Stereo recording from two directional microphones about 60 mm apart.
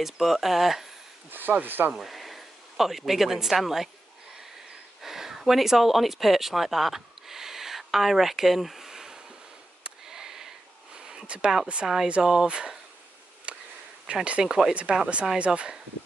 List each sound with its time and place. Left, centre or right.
0.0 s speech: centre
1.3 s speech: right
2.0 s speech: centre
5.0 s speech: centre
9.8 s a sound: centre
11.0 s speech: centre
13.5 s a sound: centre
14.1 s speech: right
14.4 s speech: centre
14.7 s speech: centre